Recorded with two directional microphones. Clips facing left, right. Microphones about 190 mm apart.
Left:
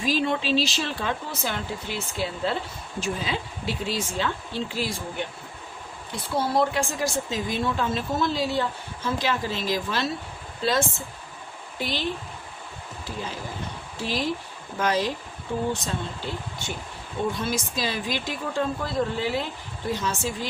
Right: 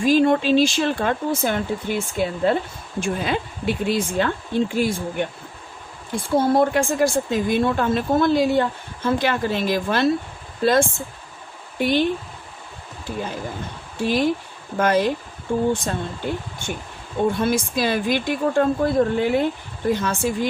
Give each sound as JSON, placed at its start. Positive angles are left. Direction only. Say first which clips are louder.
{"t": 0.0, "sound": "speech", "louder": "right 8 dB", "side_deg": -50}
{"t": 14.0, "sound": "speech", "louder": "right 8 dB", "side_deg": -55}